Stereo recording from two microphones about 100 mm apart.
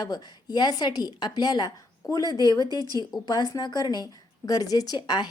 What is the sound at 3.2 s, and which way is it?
A woman's voice, 45° left (ahead or behind).